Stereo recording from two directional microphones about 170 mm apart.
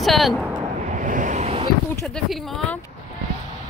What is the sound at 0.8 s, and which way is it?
Vehicle, 50° right (ahead or behind).